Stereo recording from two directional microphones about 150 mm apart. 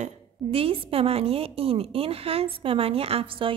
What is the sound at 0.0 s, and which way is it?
A woman's voice, 40° right (ahead or behind).